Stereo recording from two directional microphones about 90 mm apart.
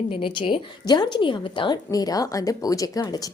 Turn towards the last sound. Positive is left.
turn(degrees=45)  # may be behind; listen again after turning